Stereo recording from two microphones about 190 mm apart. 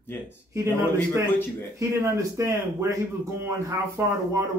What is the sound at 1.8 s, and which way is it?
Speech, 15° right (ahead or behind).